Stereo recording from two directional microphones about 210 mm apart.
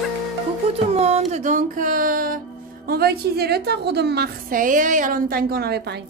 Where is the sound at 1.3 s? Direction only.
35° right (ahead or behind).